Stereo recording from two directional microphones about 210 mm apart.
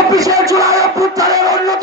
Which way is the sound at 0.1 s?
15° right (ahead or behind).